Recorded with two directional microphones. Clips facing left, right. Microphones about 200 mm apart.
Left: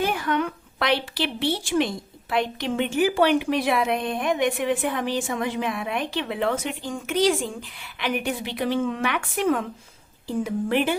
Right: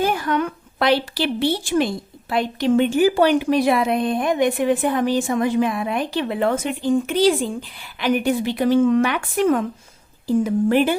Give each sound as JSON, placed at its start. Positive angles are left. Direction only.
{"t": 0.0, "sound": "a woman's voice", "side_deg": -40}